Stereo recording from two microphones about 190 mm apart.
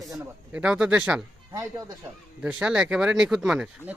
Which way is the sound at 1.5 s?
20° right (ahead or behind).